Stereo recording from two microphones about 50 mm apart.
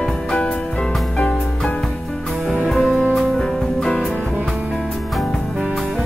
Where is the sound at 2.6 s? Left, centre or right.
Centre.